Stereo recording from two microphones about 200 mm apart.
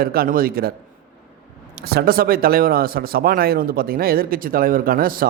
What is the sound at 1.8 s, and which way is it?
A man's voice, 50° right (ahead or behind).